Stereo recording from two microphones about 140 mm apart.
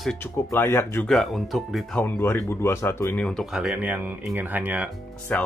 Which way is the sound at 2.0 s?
15° left (ahead or behind).